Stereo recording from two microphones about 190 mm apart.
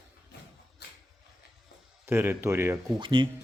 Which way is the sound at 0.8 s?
60° left (ahead or behind).